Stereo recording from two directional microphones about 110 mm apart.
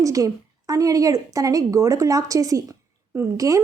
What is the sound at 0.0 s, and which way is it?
A woman's voice, 30° right (ahead or behind).